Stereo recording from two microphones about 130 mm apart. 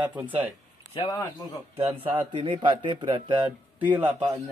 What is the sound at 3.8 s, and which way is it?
Speech, 10° right (ahead or behind).